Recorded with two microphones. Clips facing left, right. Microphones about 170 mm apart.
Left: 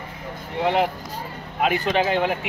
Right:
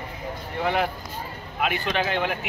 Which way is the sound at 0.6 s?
20° left (ahead or behind).